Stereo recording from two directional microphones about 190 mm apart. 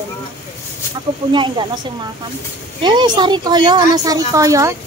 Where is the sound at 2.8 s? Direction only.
25° right (ahead or behind).